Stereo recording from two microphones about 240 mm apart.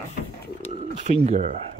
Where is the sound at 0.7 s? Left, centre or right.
Right.